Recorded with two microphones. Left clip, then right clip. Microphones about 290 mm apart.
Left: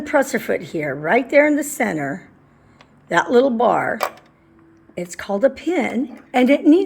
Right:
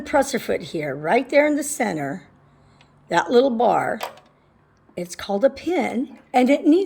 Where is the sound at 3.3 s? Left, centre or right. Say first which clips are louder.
Left 1 dB; centre.